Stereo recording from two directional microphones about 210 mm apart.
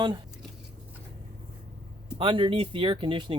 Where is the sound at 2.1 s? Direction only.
25° right (ahead or behind).